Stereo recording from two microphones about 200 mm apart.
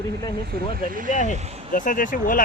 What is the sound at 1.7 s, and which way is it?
Speech, 40° left (ahead or behind).